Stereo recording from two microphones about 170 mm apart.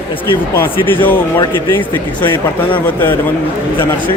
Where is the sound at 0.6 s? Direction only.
10° left (ahead or behind).